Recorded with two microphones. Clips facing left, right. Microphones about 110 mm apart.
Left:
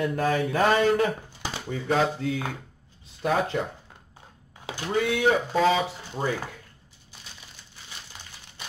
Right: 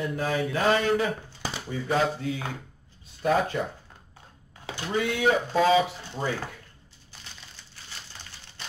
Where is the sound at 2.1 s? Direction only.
45° left (ahead or behind).